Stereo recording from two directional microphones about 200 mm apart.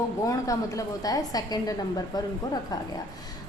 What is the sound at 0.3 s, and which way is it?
A woman's voice, 15° left (ahead or behind).